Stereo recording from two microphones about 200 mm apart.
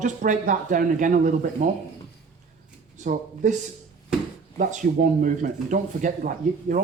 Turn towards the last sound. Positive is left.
turn(degrees=-40)  # may be behind; listen again after turning